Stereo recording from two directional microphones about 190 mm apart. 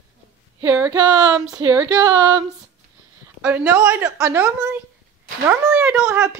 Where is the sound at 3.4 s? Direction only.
5° right (ahead or behind).